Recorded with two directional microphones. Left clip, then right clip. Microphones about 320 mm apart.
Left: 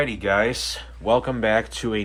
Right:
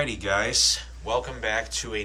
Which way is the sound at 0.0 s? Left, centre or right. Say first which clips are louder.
Left 4 dB; centre.